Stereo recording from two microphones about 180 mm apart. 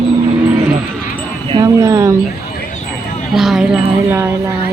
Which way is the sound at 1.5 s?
20° right (ahead or behind).